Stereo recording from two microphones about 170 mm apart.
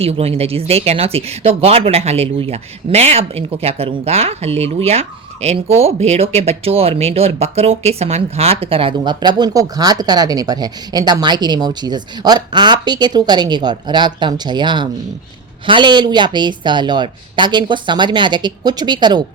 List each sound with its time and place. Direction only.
0.0 s speech: 35° right (ahead or behind)